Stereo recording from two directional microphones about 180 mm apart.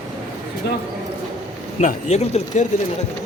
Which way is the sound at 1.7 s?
40° left (ahead or behind).